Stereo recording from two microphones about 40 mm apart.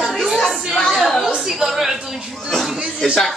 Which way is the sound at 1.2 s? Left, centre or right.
Centre.